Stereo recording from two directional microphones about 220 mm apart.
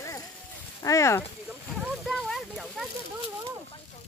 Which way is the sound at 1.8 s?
Centre (ahead or behind).